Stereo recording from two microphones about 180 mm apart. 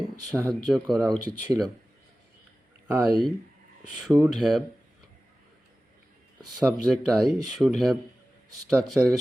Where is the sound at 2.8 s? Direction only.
15° right (ahead or behind).